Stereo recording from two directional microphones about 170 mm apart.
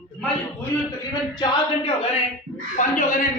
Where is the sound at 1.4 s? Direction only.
35° left (ahead or behind).